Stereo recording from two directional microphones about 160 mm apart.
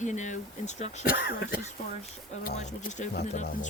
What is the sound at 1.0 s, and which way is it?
Speech, 70° left (ahead or behind).